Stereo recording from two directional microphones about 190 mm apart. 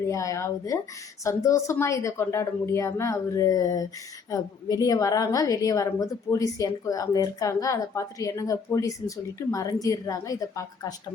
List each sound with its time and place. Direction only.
0.1 s a woman's voice: 15° left (ahead or behind)